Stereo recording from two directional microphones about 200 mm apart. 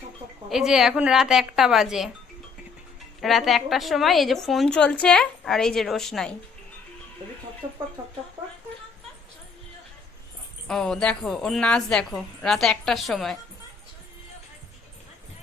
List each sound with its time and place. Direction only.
0.5 s a woman's voice: centre (ahead or behind)
3.2 s a woman's voice: centre (ahead or behind)
7.6 s speech: 20° right (ahead or behind)
10.7 s a woman's voice: 5° left (ahead or behind)